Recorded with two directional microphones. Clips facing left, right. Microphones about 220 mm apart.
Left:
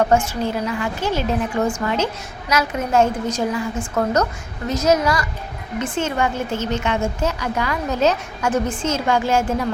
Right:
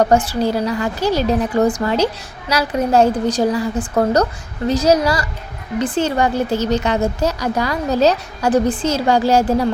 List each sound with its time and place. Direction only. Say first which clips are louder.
0.0 s a woman's voice: right 3 dB; 35° right (ahead or behind)